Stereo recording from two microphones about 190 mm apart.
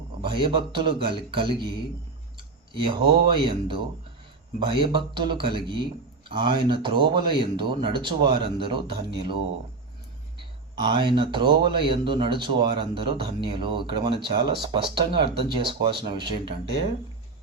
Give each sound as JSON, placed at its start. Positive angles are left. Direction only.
{"t": 0.2, "sound": "speech", "side_deg": -25}
{"t": 2.7, "sound": "speech", "side_deg": -25}
{"t": 10.8, "sound": "speech", "side_deg": -25}